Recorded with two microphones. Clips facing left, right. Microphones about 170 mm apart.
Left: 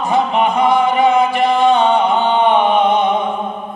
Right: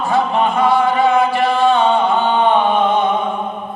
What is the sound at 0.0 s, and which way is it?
Music, 20° left (ahead or behind).